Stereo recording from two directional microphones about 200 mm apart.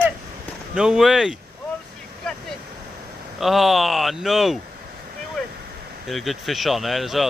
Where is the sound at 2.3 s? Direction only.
5° left (ahead or behind).